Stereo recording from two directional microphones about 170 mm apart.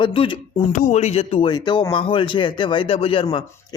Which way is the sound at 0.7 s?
45° left (ahead or behind).